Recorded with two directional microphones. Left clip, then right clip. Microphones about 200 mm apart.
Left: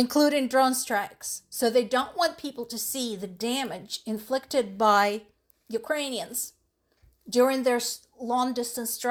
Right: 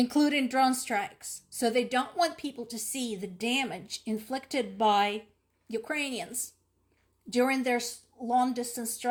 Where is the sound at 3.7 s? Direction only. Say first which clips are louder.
Left 2 dB; 15° left (ahead or behind).